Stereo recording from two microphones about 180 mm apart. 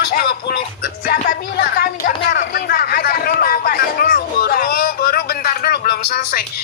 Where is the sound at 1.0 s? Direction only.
55° left (ahead or behind).